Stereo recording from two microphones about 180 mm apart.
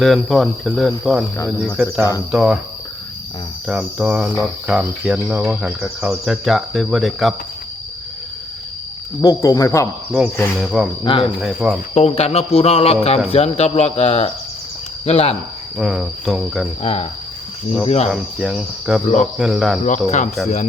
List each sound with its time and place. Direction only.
0.0 s cricket: centre (ahead or behind)
1.7 s speech: 10° right (ahead or behind)
2.3 s cricket: centre (ahead or behind)
3.7 s cricket: 5° right (ahead or behind)
9.2 s speech: 20° left (ahead or behind)
10.1 s cricket: 10° left (ahead or behind)
11.0 s speech: 30° left (ahead or behind)
11.3 s cricket: centre (ahead or behind)
11.9 s a man's voice: 35° left (ahead or behind)
15.8 s cricket: centre (ahead or behind)
16.8 s a man's voice: 35° left (ahead or behind)
18.1 s cricket: centre (ahead or behind)
20.1 s a man's voice: 40° left (ahead or behind)